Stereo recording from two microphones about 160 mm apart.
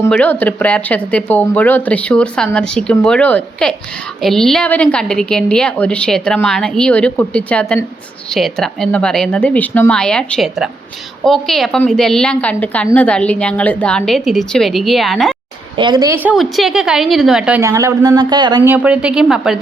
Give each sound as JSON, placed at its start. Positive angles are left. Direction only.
{"t": 0.1, "sound": "a woman's voice", "side_deg": 10}
{"t": 15.7, "sound": "a woman's voice", "side_deg": -30}
{"t": 16.1, "sound": "a woman's voice", "side_deg": -10}
{"t": 17.6, "sound": "speech", "side_deg": -20}
{"t": 18.6, "sound": "a woman's voice", "side_deg": -10}